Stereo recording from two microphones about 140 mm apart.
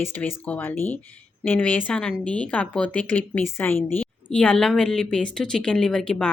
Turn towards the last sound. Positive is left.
turn(degrees=5)  # may be behind; listen again after turning